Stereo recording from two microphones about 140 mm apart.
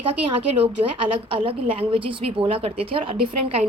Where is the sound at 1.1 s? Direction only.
40° right (ahead or behind).